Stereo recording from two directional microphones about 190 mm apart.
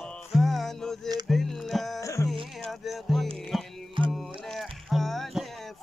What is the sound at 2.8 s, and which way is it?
Music, centre (ahead or behind).